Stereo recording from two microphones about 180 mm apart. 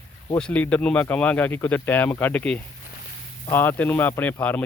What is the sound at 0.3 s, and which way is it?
Speech, 5° left (ahead or behind).